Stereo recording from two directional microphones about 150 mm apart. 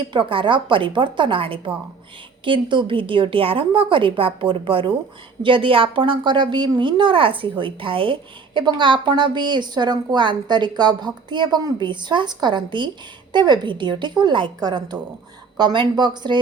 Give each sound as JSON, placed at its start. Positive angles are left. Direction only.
{"t": 0.1, "sound": "a woman's voice", "side_deg": -35}